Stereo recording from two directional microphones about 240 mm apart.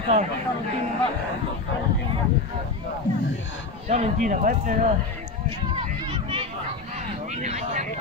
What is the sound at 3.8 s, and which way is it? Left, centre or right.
Speech, right.